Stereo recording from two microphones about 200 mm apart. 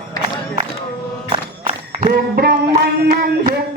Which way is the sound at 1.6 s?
35° right (ahead or behind).